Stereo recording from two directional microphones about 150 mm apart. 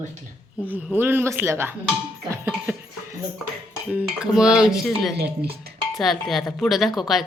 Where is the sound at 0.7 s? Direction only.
10° right (ahead or behind).